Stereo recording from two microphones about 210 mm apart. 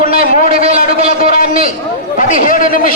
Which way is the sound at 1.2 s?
45° left (ahead or behind).